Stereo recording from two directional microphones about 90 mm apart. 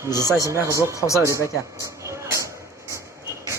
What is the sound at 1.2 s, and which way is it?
Speech, 35° right (ahead or behind).